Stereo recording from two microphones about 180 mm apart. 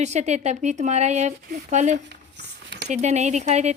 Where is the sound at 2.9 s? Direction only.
40° right (ahead or behind).